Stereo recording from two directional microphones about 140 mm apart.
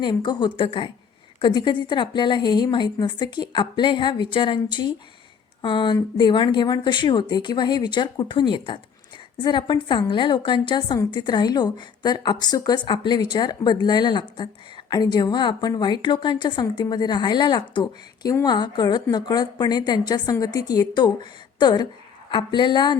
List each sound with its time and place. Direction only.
0.0 s a woman's voice: 35° left (ahead or behind)